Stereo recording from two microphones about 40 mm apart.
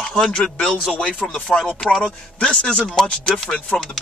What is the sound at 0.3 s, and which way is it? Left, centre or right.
Speech, left.